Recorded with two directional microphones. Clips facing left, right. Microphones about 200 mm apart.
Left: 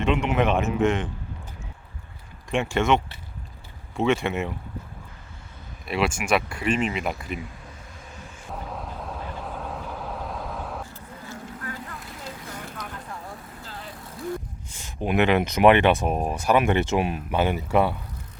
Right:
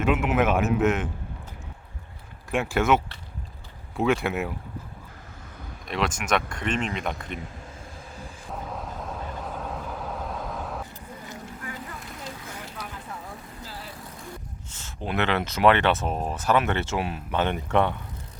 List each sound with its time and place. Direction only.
0.0 s a man's voice: 5° right (ahead or behind)
2.5 s a man's voice: 5° right (ahead or behind)
5.8 s speech: 5° left (ahead or behind)
8.4 s vehicle: centre (ahead or behind)
11.3 s vehicle: 15° right (ahead or behind)
14.7 s speech: 15° left (ahead or behind)